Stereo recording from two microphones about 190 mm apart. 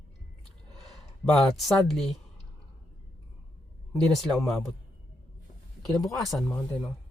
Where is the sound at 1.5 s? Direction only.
Centre (ahead or behind).